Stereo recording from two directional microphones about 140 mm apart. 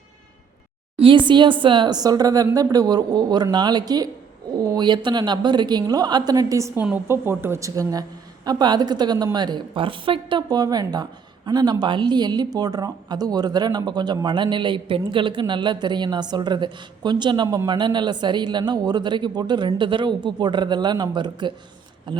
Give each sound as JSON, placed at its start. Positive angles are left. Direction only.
{"t": 0.9, "sound": "a woman's voice", "side_deg": -40}